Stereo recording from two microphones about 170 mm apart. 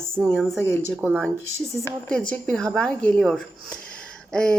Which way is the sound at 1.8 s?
5° left (ahead or behind).